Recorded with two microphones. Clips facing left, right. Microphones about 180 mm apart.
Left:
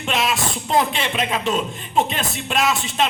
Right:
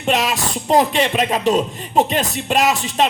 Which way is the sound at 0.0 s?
40° right (ahead or behind).